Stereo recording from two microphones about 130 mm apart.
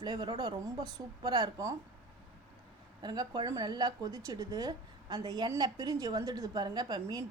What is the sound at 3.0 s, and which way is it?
A woman's voice, 35° right (ahead or behind).